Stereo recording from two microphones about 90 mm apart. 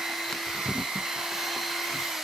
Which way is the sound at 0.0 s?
Centre (ahead or behind).